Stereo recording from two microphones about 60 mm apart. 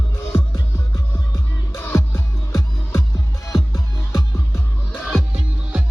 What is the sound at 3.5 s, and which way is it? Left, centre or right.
Music, left.